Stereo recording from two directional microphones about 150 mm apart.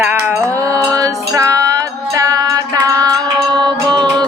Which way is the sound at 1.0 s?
25° right (ahead or behind).